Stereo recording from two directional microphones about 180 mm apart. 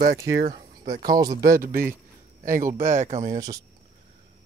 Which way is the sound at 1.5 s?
55° right (ahead or behind).